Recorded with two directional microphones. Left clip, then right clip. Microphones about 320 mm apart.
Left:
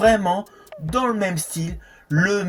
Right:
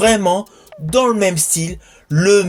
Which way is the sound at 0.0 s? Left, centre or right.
Left.